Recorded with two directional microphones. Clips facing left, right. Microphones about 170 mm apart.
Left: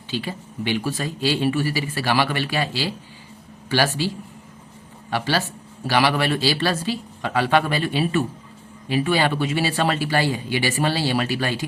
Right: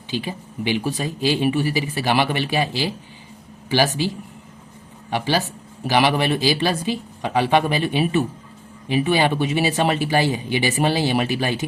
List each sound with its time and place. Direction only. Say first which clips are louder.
0.1 s speech: right 1 dB; 15° right (ahead or behind)
5.1 s speech: right 2 dB; 15° right (ahead or behind)